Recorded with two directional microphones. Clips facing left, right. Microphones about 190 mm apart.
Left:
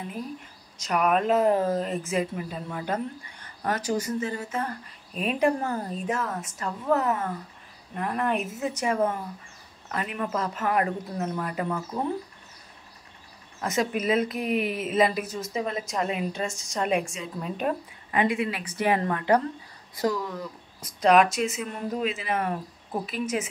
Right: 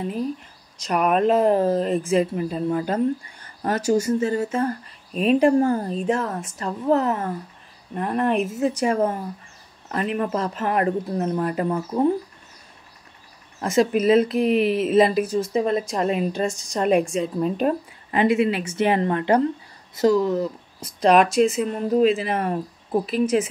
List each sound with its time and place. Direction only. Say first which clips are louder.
0.7 s speech: right 4 dB; 35° right (ahead or behind)
13.6 s speech: right 7 dB; 30° right (ahead or behind)